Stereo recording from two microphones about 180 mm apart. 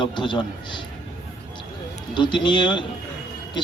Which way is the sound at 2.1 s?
25° left (ahead or behind).